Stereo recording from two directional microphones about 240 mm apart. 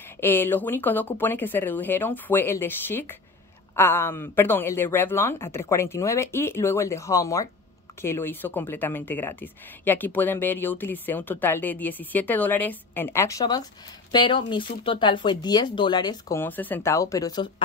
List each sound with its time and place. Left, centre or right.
0.2 s speech: centre